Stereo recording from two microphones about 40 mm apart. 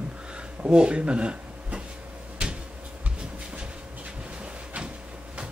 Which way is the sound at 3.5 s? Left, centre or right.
Right.